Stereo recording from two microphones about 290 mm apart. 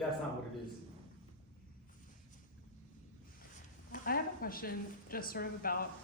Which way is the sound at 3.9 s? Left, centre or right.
Left.